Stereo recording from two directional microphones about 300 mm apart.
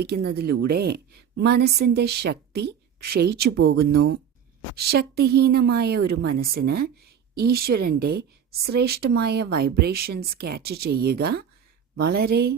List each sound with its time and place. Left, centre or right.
0.0 s speech: right